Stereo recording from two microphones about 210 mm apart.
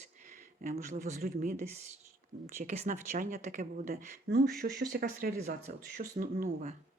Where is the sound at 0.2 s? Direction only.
40° right (ahead or behind).